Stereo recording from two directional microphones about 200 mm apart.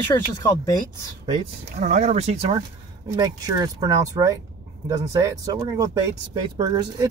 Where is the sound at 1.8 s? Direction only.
35° right (ahead or behind).